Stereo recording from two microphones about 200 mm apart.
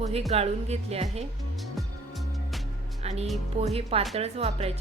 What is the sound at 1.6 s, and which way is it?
Music, centre (ahead or behind).